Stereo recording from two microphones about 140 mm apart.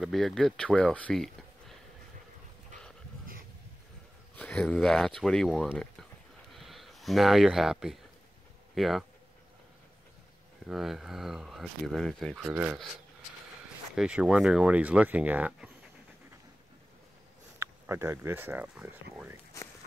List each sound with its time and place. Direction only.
0.0 s speech: centre (ahead or behind)
4.4 s speech: 10° left (ahead or behind)
10.7 s speech: centre (ahead or behind)
13.9 s speech: 5° right (ahead or behind)
17.6 s speech: 20° right (ahead or behind)